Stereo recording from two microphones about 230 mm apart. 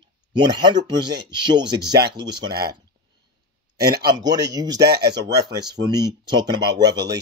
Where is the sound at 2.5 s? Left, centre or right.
Right.